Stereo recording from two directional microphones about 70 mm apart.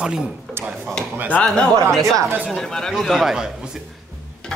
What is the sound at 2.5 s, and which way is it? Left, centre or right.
Speech, centre.